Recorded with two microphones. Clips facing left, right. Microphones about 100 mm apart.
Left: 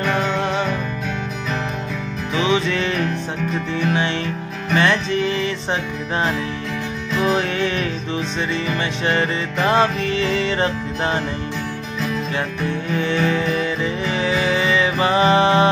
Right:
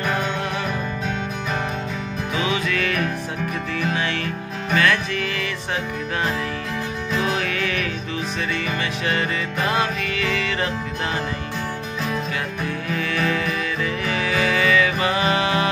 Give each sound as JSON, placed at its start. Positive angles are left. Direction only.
{"t": 2.3, "sound": "music", "side_deg": 25}
{"t": 7.3, "sound": "music", "side_deg": 25}
{"t": 9.0, "sound": "music", "side_deg": 30}
{"t": 12.9, "sound": "music", "side_deg": 25}